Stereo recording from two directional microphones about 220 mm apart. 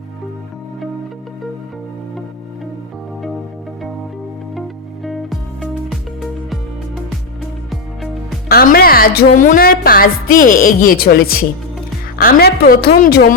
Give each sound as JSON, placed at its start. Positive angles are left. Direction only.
{"t": 5.0, "sound": "music", "side_deg": 0}
{"t": 8.4, "sound": "a woman's voice", "side_deg": 40}